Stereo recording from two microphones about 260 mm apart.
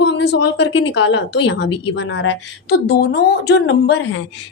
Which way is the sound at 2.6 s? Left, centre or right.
Left.